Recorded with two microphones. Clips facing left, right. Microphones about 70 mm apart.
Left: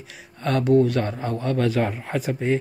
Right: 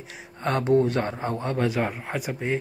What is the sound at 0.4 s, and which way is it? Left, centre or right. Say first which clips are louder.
Speech: left 3 dB; right.